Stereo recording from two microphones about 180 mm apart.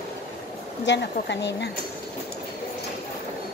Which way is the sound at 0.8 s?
75° left (ahead or behind).